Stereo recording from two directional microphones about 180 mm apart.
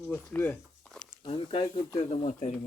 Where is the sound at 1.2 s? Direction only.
30° left (ahead or behind).